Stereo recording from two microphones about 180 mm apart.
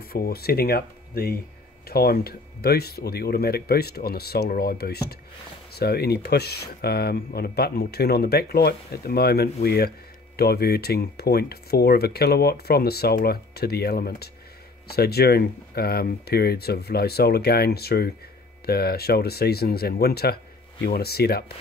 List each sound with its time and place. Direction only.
0.1 s speech: 60° left (ahead or behind)